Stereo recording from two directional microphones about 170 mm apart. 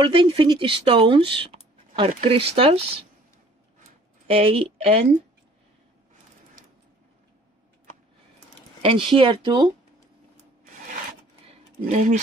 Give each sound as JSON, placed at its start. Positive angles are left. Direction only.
{"t": 0.0, "sound": "speech", "side_deg": -30}
{"t": 4.3, "sound": "speech", "side_deg": -35}
{"t": 8.8, "sound": "speech", "side_deg": -30}
{"t": 11.9, "sound": "speech", "side_deg": -45}